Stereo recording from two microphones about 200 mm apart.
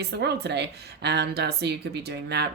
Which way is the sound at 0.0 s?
55° right (ahead or behind).